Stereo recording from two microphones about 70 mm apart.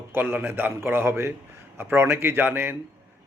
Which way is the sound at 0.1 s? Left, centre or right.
Right.